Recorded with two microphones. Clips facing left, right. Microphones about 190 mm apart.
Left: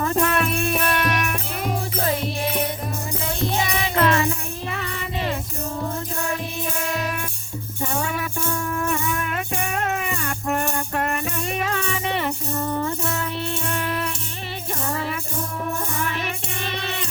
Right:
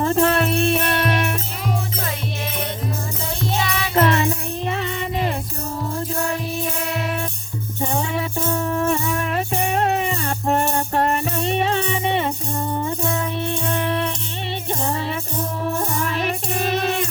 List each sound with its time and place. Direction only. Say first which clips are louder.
0.0 s music: right 4 dB; 30° right (ahead or behind)
3.4 s music: right 1 dB; 20° left (ahead or behind)
3.9 s music: right 3 dB; 25° right (ahead or behind)
7.8 s music: right 3 dB; 25° right (ahead or behind)
15.8 s music: right 4 dB; 35° right (ahead or behind)